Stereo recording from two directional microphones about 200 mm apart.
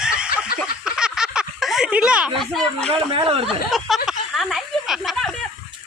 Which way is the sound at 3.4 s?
Centre (ahead or behind).